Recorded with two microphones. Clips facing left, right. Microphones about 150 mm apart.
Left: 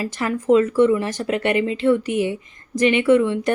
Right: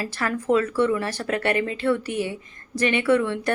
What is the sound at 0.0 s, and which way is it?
Speech, 15° left (ahead or behind).